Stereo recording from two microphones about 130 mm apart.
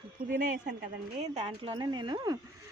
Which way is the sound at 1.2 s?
55° right (ahead or behind).